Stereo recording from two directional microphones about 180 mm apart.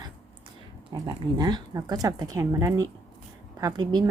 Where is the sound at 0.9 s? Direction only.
25° right (ahead or behind).